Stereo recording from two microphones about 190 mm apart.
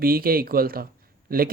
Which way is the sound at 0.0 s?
50° right (ahead or behind).